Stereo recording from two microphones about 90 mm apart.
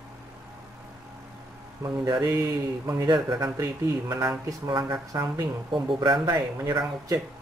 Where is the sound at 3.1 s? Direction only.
50° right (ahead or behind).